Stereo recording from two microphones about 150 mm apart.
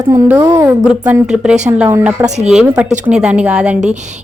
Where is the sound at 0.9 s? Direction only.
5° right (ahead or behind).